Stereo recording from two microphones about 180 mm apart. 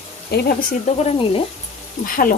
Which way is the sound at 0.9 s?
35° left (ahead or behind).